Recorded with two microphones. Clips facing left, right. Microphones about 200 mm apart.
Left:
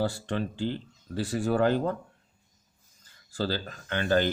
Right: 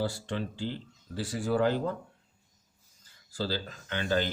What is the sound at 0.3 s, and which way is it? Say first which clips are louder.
Speech: left 4 dB; 55° left (ahead or behind).